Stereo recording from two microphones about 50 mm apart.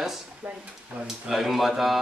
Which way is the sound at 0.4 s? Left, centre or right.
Right.